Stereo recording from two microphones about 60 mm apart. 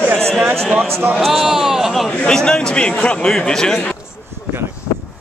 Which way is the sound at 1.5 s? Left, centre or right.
Centre.